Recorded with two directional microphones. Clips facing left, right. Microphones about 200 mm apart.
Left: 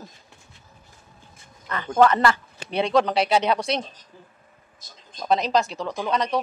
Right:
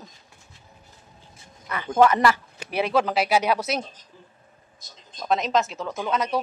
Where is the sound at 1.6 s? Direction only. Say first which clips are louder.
Even; 10° right (ahead or behind).